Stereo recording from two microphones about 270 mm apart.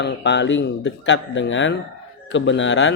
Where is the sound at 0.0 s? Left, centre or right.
Left.